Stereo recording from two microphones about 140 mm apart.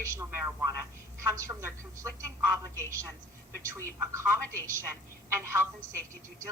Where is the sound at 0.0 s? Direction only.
20° right (ahead or behind).